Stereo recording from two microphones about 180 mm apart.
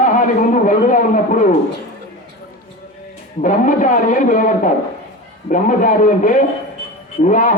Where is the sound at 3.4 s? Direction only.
45° left (ahead or behind).